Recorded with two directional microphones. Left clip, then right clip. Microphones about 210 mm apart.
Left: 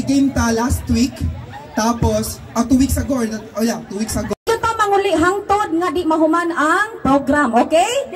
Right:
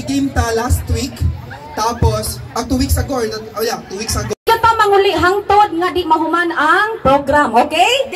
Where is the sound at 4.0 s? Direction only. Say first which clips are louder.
Right 5 dB; 45° left (ahead or behind).